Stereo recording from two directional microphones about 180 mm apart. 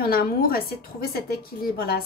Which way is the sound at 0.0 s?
55° left (ahead or behind).